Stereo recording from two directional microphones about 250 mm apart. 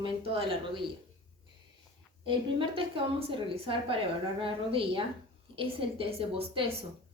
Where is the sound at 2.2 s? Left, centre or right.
Right.